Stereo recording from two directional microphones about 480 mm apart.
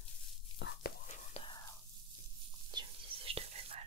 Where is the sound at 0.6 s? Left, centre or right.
Centre.